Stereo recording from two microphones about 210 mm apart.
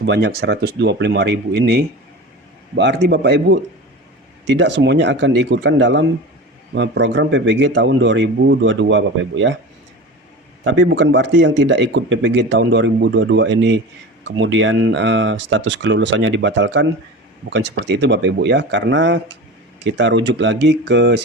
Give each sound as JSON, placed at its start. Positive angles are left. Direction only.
{"t": 0.0, "sound": "speech", "side_deg": -55}
{"t": 10.6, "sound": "speech", "side_deg": -65}